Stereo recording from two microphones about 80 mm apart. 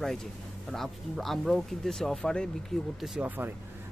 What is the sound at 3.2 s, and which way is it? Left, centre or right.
Speech, right.